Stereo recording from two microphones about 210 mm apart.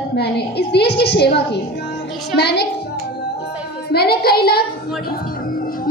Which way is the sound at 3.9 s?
45° left (ahead or behind).